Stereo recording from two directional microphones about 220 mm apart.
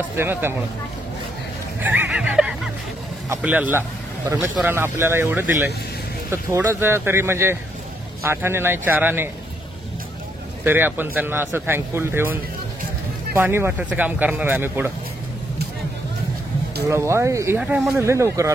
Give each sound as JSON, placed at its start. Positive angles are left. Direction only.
{"t": 0.2, "sound": "a man's voice", "side_deg": -10}
{"t": 1.8, "sound": "a sound", "side_deg": -10}
{"t": 3.3, "sound": "a man's voice", "side_deg": -5}
{"t": 10.6, "sound": "a man's voice", "side_deg": -10}
{"t": 16.8, "sound": "a man's voice", "side_deg": -10}